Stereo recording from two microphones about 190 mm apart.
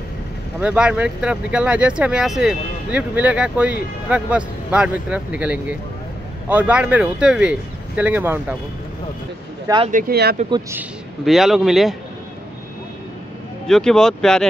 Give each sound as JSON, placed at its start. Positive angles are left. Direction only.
{"t": 0.6, "sound": "speech", "side_deg": -5}
{"t": 9.8, "sound": "speech", "side_deg": -50}
{"t": 10.7, "sound": "speech", "side_deg": -5}
{"t": 13.7, "sound": "speech", "side_deg": 5}